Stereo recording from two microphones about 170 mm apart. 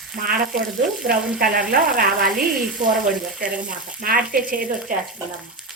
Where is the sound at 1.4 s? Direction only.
60° right (ahead or behind).